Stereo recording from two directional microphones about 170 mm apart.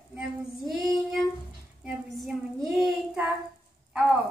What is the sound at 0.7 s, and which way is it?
A woman's voice, centre (ahead or behind).